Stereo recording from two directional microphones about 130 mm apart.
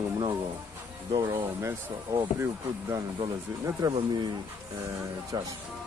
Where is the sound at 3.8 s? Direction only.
30° right (ahead or behind).